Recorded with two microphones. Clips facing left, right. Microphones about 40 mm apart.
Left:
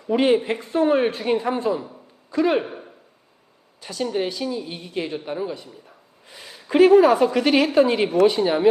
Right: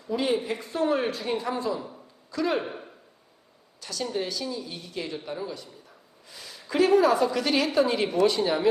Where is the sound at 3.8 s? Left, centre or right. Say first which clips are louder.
Left 6 dB; left.